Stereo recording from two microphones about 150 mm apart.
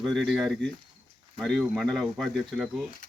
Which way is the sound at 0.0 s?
Centre (ahead or behind).